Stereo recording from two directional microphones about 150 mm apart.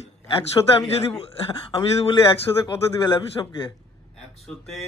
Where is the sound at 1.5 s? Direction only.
35° left (ahead or behind).